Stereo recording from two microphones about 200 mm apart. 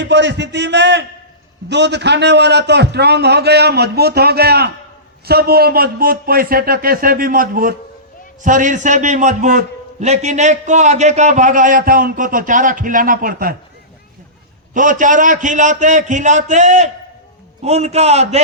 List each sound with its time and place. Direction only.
0.0 s a man's voice: 60° right (ahead or behind)
14.7 s a man's voice: 40° right (ahead or behind)